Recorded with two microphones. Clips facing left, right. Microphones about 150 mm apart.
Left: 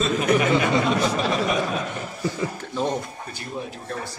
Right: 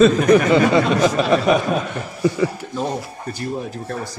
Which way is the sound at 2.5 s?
10° right (ahead or behind).